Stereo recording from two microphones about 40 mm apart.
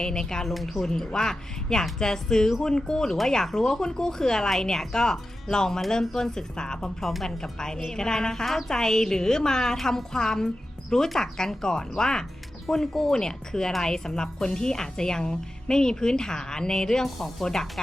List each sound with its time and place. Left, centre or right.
0.0 s a woman's voice: centre
0.4 s a woman's voice: centre